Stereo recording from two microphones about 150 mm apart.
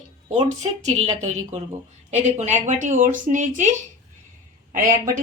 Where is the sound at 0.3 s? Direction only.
45° right (ahead or behind).